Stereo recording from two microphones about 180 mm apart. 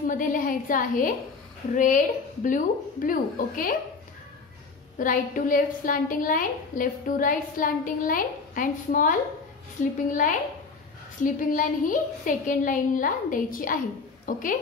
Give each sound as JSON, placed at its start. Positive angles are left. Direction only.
{"t": 0.0, "sound": "a woman's voice", "side_deg": 50}
{"t": 4.9, "sound": "a woman's voice", "side_deg": 50}